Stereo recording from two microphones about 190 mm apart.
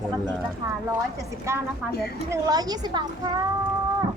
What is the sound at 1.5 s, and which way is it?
A woman's voice, 15° right (ahead or behind).